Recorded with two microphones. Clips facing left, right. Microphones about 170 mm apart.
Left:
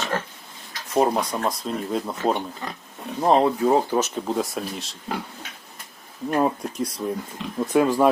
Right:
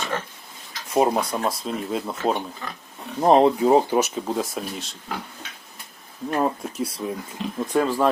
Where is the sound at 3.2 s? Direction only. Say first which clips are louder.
Right 2 dB; 20° right (ahead or behind).